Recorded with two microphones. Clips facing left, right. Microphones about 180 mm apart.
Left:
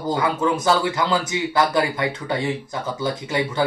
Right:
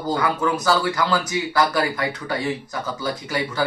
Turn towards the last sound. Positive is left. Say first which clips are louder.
# left 2 dB
turn(degrees=25)  # may be behind; listen again after turning